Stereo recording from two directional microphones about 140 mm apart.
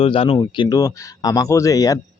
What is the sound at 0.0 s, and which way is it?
Speech, 40° left (ahead or behind).